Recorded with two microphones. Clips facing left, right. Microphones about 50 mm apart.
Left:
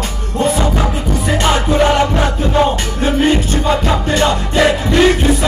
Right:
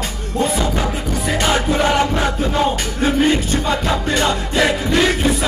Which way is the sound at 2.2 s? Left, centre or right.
Centre.